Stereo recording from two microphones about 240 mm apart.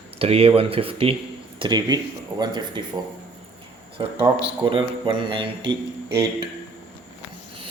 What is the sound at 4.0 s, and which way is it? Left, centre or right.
Speech, centre.